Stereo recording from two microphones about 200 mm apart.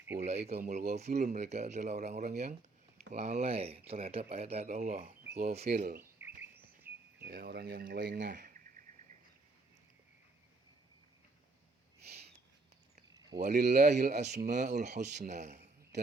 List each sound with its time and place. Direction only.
0.2 s speech: 35° right (ahead or behind)
0.6 s speech: 45° right (ahead or behind)
6.0 s chirp: 10° right (ahead or behind)
7.2 s speech: 55° right (ahead or behind)
13.4 s speech: 55° right (ahead or behind)
14.0 s speech: 35° right (ahead or behind)